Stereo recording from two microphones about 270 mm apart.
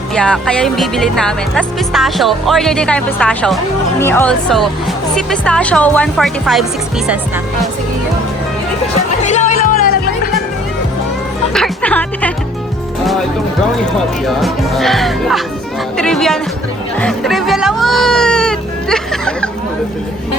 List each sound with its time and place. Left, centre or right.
0.1 s speech: centre
9.2 s music: left
11.5 s speech: centre
14.3 s speech: centre